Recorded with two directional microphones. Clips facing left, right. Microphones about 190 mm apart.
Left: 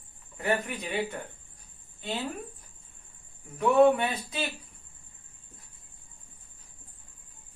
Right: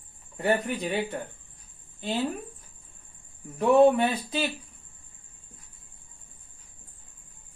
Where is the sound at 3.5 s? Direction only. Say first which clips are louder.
Right 2 dB; 30° right (ahead or behind).